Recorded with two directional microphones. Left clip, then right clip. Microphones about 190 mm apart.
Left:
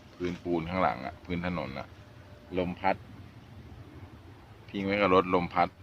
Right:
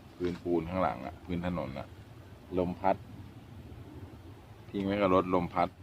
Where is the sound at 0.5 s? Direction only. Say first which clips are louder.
Left 3 dB; 25° left (ahead or behind); by 3.0 s 5° left (ahead or behind).